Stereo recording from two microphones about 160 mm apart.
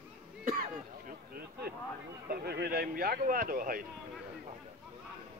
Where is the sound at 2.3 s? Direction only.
80° right; by 3.8 s 65° right (ahead or behind).